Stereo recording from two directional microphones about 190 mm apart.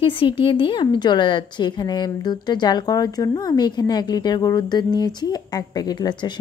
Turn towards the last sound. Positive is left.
turn(degrees=25)  # may be behind; listen again after turning